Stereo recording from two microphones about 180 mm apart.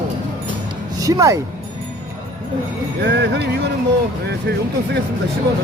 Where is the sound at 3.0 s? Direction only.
70° right (ahead or behind).